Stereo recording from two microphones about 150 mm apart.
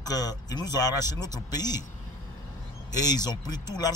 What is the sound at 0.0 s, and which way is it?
A man's voice, 25° left (ahead or behind).